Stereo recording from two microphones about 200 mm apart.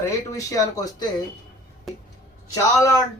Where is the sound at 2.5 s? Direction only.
15° left (ahead or behind).